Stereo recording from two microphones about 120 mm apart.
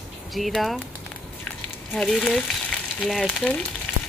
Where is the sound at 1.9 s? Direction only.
5° left (ahead or behind).